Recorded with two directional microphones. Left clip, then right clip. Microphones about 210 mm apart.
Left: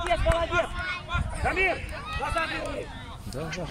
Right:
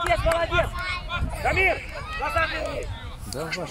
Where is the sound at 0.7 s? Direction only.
45° right (ahead or behind).